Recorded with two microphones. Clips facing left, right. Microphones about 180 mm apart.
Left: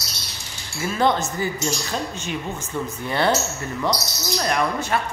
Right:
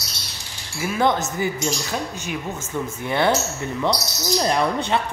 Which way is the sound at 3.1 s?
15° right (ahead or behind).